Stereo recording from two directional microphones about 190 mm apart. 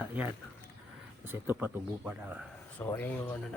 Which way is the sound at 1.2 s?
10° right (ahead or behind).